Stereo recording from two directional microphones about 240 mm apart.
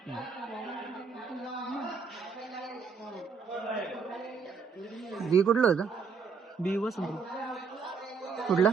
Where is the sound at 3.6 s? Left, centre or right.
Centre.